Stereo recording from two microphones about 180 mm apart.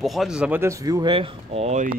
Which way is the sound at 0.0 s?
Centre (ahead or behind).